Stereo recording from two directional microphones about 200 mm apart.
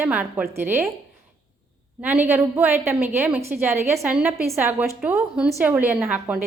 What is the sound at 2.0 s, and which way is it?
A woman's voice, 10° right (ahead or behind).